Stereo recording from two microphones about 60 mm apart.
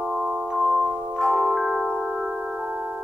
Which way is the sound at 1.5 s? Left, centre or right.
Centre.